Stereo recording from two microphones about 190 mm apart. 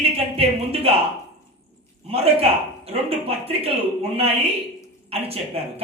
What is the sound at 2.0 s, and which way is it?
A man's voice, 30° right (ahead or behind).